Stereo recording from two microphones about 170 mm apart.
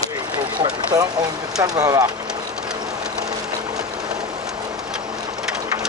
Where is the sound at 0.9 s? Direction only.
20° right (ahead or behind).